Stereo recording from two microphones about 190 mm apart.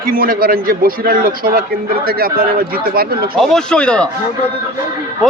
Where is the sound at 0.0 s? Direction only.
50° right (ahead or behind).